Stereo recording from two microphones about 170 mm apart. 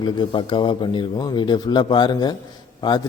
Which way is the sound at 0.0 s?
30° left (ahead or behind).